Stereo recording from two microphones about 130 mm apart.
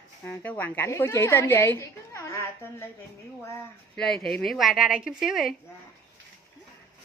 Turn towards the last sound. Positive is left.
turn(degrees=0)  # may be behind; listen again after turning